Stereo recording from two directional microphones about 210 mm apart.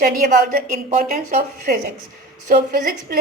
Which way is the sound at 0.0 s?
45° right (ahead or behind).